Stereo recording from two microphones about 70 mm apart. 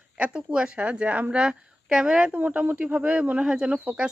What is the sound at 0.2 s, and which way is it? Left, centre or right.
A woman's voice, centre.